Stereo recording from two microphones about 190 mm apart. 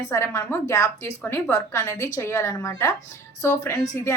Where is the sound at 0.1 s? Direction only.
15° left (ahead or behind).